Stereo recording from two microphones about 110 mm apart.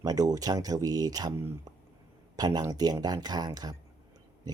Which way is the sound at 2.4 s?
35° right (ahead or behind).